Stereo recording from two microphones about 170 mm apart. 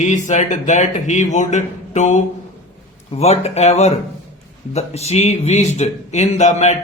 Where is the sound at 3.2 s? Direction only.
40° left (ahead or behind).